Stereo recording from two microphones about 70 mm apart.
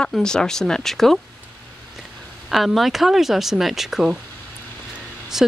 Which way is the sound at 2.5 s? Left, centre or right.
Centre.